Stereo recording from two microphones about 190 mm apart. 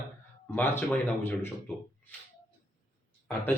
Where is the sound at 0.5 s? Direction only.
10° left (ahead or behind).